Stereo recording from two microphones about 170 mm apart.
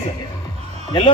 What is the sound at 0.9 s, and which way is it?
Speech, 30° left (ahead or behind).